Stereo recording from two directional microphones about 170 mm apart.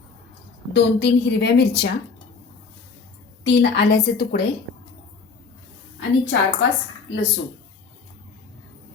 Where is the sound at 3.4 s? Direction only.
80° left.